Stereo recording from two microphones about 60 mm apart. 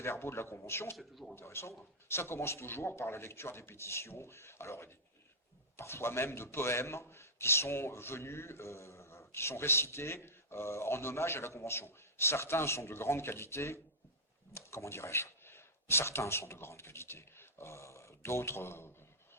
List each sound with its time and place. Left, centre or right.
0.0 s a man's voice: left
0.9 s speech: centre
1.4 s a man's voice: left